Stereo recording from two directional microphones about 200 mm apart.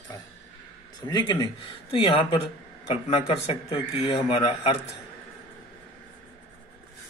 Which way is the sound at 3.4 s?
25° left (ahead or behind).